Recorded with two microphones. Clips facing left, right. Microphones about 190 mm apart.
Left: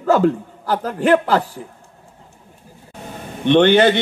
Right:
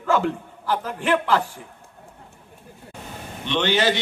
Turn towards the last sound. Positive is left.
turn(degrees=55)  # may be behind; listen again after turning